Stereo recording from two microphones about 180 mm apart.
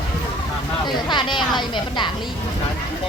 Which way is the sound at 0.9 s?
25° left (ahead or behind).